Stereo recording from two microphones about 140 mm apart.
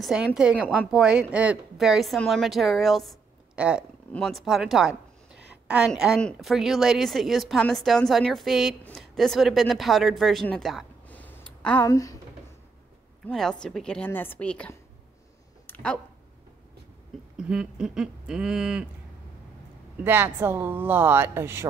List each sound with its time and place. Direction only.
0.0 s a woman's voice: 5° right (ahead or behind)
11.1 s a sound: 10° left (ahead or behind)
11.9 s speech: 20° left (ahead or behind)
13.3 s a woman's voice: 5° left (ahead or behind)
15.6 s a sound: 10° left (ahead or behind)
17.4 s a woman's voice: 5° right (ahead or behind)
20.0 s speech: 15° right (ahead or behind)